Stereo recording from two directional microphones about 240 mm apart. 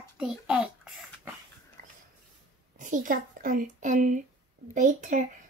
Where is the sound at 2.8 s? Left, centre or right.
Right.